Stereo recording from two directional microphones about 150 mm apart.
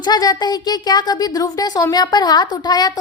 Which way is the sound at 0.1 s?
25° left (ahead or behind).